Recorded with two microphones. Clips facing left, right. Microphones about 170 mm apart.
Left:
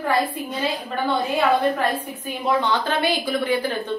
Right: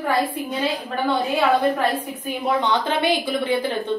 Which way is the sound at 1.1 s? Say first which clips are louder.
Right 1 dB; 5° right (ahead or behind).